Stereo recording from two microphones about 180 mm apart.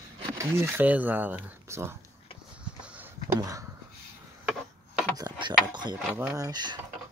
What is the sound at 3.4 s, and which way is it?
Speech, 20° right (ahead or behind).